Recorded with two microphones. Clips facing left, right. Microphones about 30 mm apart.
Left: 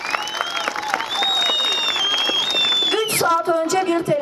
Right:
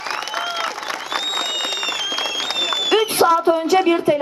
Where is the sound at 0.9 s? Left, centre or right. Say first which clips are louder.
Left 6 dB; left.